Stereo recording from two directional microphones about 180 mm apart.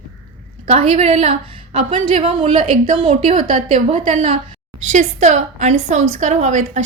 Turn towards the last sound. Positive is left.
turn(degrees=-40)  # may be behind; listen again after turning